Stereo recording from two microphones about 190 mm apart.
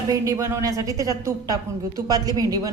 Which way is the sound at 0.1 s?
15° right (ahead or behind).